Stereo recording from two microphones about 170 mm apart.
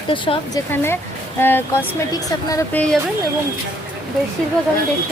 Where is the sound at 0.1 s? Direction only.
30° left (ahead or behind).